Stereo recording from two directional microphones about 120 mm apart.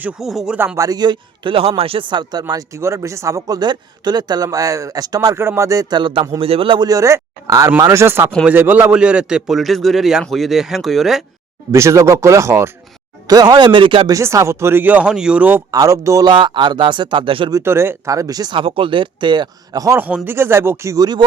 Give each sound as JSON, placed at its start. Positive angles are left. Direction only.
{"t": 0.0, "sound": "a man's voice", "side_deg": -5}
{"t": 0.8, "sound": "speech", "side_deg": -35}
{"t": 2.5, "sound": "speech", "side_deg": -25}
{"t": 6.8, "sound": "a man's voice", "side_deg": -25}
{"t": 11.7, "sound": "speech", "side_deg": -25}
{"t": 13.2, "sound": "speech", "side_deg": -35}
{"t": 14.1, "sound": "speech", "side_deg": -25}
{"t": 15.7, "sound": "speech", "side_deg": -30}
{"t": 16.3, "sound": "speech", "side_deg": -40}
{"t": 17.5, "sound": "speech", "side_deg": -20}
{"t": 20.0, "sound": "speech", "side_deg": -15}